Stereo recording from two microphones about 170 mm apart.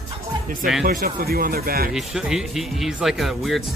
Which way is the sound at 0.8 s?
60° right (ahead or behind).